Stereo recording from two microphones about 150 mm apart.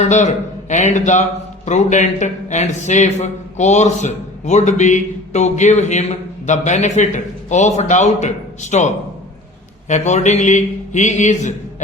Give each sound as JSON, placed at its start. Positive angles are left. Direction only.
{"t": 0.0, "sound": "a man's voice", "side_deg": 50}
{"t": 9.9, "sound": "a man's voice", "side_deg": 50}